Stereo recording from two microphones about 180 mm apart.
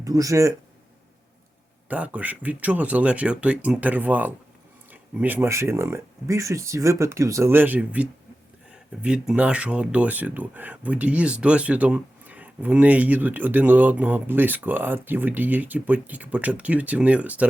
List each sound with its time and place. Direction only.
0.0 s speech: 20° right (ahead or behind)
1.9 s speech: 10° right (ahead or behind)